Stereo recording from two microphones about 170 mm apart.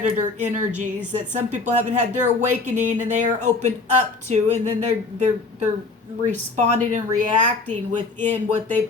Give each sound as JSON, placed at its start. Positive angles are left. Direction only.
{"t": 0.0, "sound": "speech", "side_deg": -45}